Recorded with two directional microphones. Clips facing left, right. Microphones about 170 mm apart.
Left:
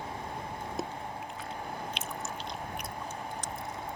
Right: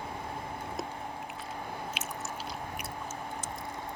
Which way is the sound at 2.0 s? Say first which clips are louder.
Even; 5° right (ahead or behind).